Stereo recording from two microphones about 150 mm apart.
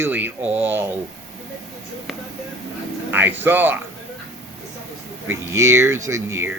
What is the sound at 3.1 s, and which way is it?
Speech, 15° right (ahead or behind).